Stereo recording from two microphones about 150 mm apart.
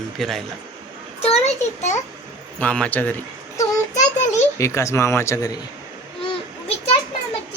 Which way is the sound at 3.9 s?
50° left (ahead or behind).